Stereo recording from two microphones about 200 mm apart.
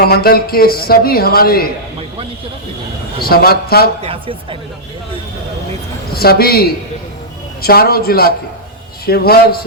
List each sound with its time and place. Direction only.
0.0 s speech: 50° left (ahead or behind)
3.2 s speech: 50° left (ahead or behind)
4.0 s speech: 25° right (ahead or behind)
6.1 s speech: 50° left (ahead or behind)